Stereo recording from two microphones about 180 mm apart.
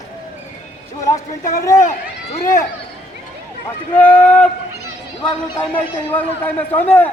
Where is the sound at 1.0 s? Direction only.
15° left (ahead or behind).